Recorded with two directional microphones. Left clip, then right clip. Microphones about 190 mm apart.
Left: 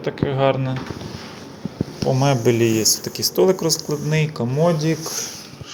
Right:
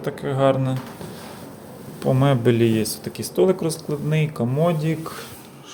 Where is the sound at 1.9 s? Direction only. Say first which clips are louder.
Left 1 dB; 20° right (ahead or behind).